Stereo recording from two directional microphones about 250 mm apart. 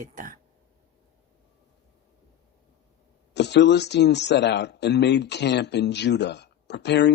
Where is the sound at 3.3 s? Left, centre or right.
Left.